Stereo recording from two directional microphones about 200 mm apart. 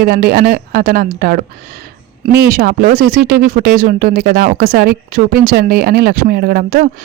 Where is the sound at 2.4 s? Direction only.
45° right (ahead or behind).